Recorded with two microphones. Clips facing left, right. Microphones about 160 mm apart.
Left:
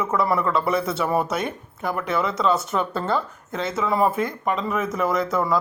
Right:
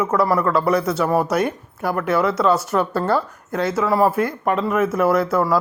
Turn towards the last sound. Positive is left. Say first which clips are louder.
# right 4 dB
turn(degrees=-5)  # may be behind; listen again after turning